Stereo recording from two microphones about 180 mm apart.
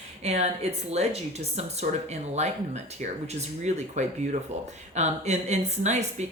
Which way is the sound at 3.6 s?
40° right (ahead or behind).